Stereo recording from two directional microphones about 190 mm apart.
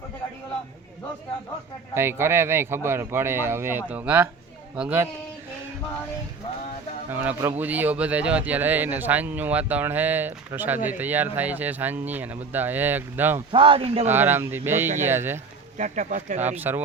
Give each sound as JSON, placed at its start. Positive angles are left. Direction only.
{"t": 2.0, "sound": "speech", "side_deg": -15}
{"t": 7.1, "sound": "speech", "side_deg": -10}
{"t": 13.5, "sound": "speech", "side_deg": -25}
{"t": 14.1, "sound": "speech", "side_deg": -10}
{"t": 15.8, "sound": "speech", "side_deg": -40}
{"t": 16.6, "sound": "speech", "side_deg": -10}